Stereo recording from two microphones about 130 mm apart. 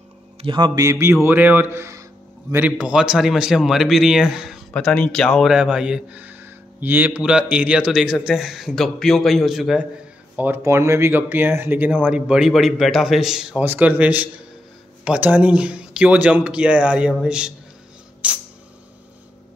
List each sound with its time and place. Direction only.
0.4 s mantra: 35° right (ahead or behind)
1.2 s speech: 15° right (ahead or behind)
2.5 s speech: 10° right (ahead or behind)
10.3 s speech: 15° right (ahead or behind)